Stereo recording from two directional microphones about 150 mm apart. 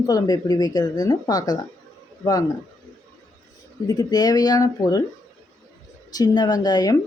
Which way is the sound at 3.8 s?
25° left (ahead or behind).